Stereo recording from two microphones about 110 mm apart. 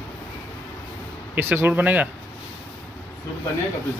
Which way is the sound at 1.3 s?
20° right (ahead or behind).